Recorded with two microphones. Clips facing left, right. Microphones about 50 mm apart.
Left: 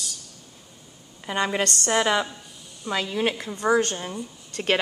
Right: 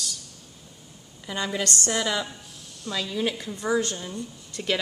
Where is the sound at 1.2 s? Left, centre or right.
Left.